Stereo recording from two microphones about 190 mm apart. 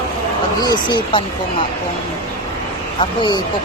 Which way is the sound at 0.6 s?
20° left (ahead or behind).